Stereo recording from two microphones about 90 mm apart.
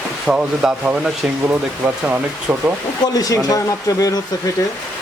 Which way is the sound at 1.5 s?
20° right (ahead or behind).